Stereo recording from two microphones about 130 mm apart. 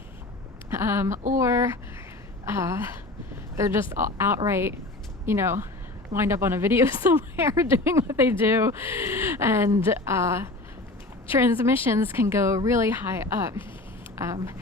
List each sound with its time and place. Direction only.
0.7 s speech: 20° right (ahead or behind)